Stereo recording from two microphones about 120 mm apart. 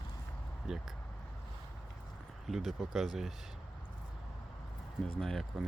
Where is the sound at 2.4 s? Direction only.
Centre (ahead or behind).